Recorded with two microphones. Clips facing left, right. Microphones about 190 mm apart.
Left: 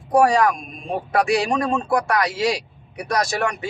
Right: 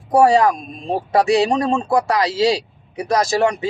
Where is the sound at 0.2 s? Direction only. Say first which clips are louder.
Right 3 dB; 25° right (ahead or behind).